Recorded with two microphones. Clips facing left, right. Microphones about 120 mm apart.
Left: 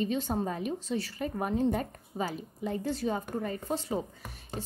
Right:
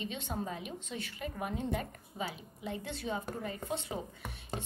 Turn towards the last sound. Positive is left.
turn(degrees=40)  # may be behind; listen again after turning